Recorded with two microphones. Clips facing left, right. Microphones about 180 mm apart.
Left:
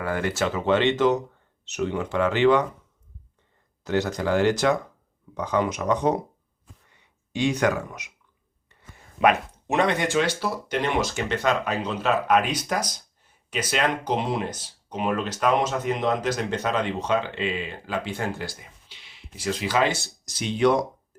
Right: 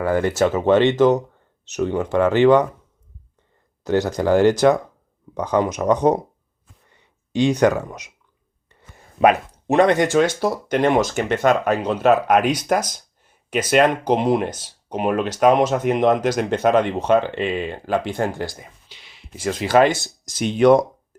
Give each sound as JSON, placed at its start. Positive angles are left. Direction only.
{"t": 0.1, "sound": "speech", "side_deg": -45}
{"t": 3.8, "sound": "speech", "side_deg": -40}
{"t": 7.3, "sound": "speech", "side_deg": -40}
{"t": 9.2, "sound": "speech", "side_deg": -40}